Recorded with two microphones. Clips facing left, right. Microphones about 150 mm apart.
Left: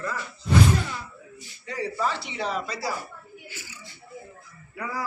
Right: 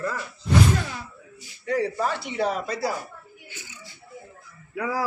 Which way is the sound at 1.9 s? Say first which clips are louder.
Right 2 dB; 50° right (ahead or behind).